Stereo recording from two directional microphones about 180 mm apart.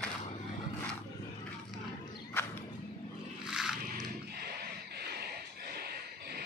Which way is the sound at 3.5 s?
Centre (ahead or behind).